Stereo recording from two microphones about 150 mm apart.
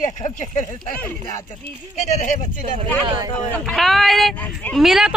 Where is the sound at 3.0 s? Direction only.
25° right (ahead or behind).